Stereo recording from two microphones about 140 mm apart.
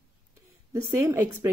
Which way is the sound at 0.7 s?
20° right (ahead or behind).